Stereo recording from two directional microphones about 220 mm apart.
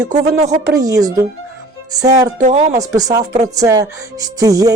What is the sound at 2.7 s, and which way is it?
Speech, 15° right (ahead or behind).